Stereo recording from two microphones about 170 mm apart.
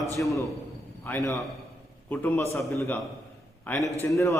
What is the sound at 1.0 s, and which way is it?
A man's voice, 15° left (ahead or behind).